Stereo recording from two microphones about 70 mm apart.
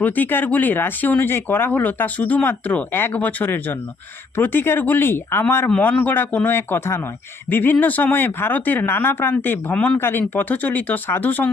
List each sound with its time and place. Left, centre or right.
0.0 s speech: left
5.6 s speech: left
9.7 s speech: centre
10.0 s speech: left